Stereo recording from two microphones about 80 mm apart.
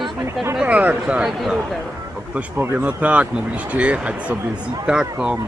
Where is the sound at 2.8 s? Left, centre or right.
Centre.